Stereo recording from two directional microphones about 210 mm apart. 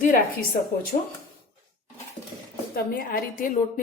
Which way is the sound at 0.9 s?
35° left (ahead or behind).